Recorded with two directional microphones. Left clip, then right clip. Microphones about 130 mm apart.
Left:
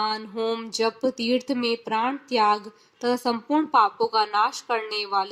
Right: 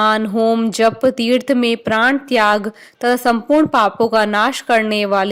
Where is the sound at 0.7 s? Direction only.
45° right (ahead or behind).